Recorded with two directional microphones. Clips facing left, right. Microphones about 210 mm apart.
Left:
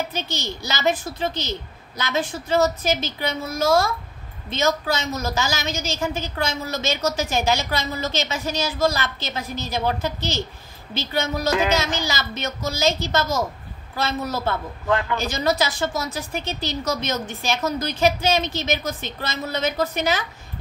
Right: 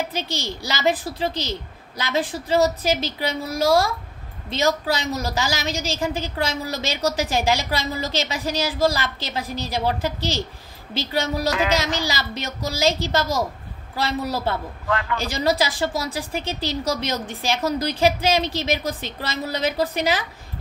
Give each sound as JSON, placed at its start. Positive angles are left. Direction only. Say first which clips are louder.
{"t": 0.1, "sound": "speech", "louder": "right 1 dB", "side_deg": -35}